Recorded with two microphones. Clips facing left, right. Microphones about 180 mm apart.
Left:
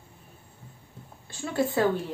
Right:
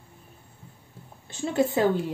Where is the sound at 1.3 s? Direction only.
20° right (ahead or behind).